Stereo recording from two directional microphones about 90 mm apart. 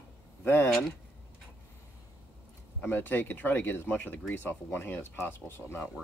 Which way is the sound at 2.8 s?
20° left (ahead or behind).